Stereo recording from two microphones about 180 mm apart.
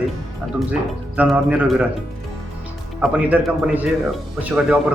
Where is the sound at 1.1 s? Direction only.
10° right (ahead or behind).